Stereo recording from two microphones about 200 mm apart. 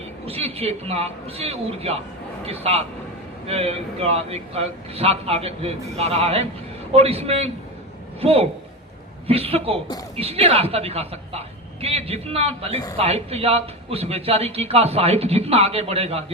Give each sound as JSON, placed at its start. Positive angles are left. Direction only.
{"t": 0.3, "sound": "a man's voice", "side_deg": -30}